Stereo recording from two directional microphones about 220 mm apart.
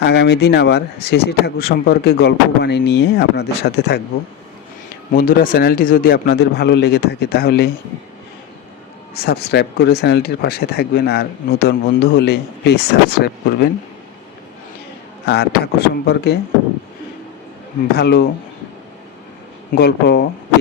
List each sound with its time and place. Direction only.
0.0 s speech: 50° left (ahead or behind)
5.1 s speech: 40° left (ahead or behind)
9.1 s speech: 45° left (ahead or behind)
15.3 s speech: 50° left (ahead or behind)
17.9 s speech: 45° left (ahead or behind)
19.7 s speech: 45° left (ahead or behind)